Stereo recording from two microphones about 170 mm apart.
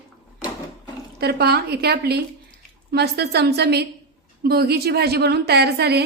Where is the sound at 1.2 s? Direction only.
70° right (ahead or behind).